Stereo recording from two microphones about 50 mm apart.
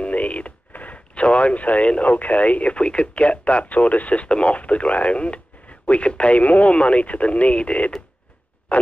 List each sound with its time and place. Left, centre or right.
0.0 s speech: left